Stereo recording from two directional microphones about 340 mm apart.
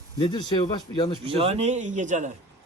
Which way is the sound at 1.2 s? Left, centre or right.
Centre.